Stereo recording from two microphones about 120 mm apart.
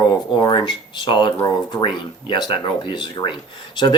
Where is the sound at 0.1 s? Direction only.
40° left (ahead or behind).